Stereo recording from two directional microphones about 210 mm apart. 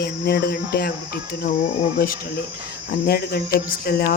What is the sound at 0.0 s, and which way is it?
Speech, 50° left (ahead or behind).